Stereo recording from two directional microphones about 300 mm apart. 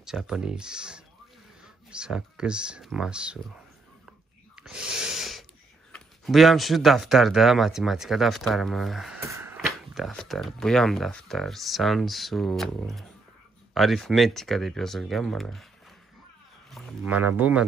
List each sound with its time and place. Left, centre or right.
0.0 s speech: centre
4.6 s snort: centre
5.9 s speech: centre
16.7 s speech: centre